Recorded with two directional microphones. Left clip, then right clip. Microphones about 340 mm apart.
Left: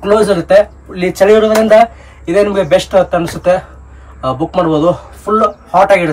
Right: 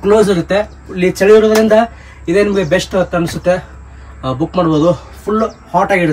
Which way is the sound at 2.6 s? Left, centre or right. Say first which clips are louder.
Left 4 dB; centre.